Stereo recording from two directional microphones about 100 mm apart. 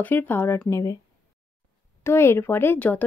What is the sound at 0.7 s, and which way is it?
Speech, 35° left (ahead or behind).